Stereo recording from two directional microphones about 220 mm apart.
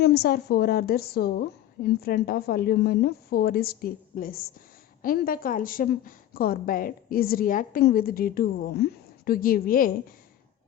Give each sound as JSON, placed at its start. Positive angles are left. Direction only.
{"t": 0.0, "sound": "a woman's voice", "side_deg": 45}